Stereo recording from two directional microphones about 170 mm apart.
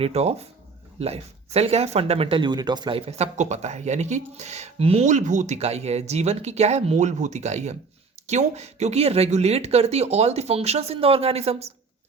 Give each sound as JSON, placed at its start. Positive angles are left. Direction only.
{"t": 0.0, "sound": "speech", "side_deg": -40}
{"t": 3.1, "sound": "speech", "side_deg": -40}